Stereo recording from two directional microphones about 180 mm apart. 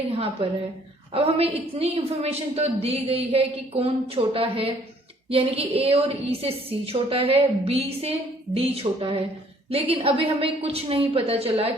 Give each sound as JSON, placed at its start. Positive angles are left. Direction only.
{"t": 1.1, "sound": "a woman's voice", "side_deg": -35}